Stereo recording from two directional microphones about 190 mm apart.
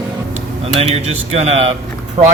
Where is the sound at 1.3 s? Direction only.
35° right (ahead or behind).